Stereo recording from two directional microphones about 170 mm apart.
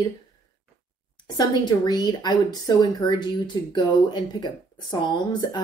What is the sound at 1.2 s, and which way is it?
Speech, 25° left (ahead or behind).